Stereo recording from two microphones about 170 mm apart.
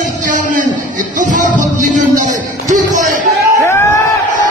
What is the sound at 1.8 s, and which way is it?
Speech, 45° right (ahead or behind).